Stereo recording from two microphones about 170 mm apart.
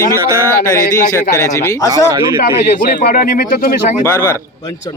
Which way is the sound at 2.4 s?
65° left (ahead or behind).